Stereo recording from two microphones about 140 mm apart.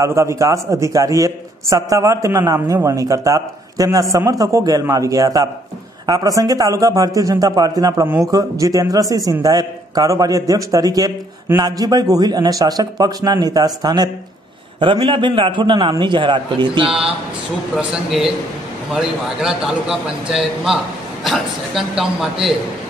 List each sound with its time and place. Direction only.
0.0 s a man's voice: 20° right (ahead or behind)
17.7 s a man's voice: 5° right (ahead or behind)